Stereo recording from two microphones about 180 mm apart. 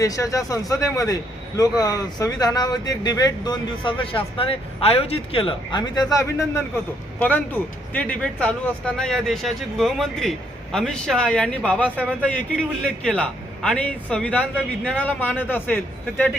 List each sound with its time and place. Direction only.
0.0 s a man's voice: 20° left (ahead or behind)